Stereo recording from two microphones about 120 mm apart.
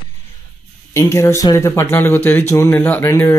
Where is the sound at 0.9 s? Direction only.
25° left (ahead or behind).